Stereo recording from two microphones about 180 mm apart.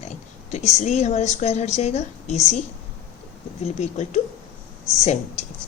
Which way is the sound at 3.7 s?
40° left (ahead or behind).